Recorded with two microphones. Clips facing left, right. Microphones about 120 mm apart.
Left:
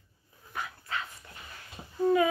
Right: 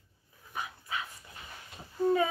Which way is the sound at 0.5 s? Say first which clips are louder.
Left 1 dB; 15° right (ahead or behind).